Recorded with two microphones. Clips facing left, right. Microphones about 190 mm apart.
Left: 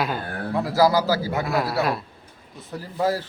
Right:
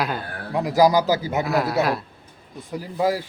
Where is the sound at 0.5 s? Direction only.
15° right (ahead or behind).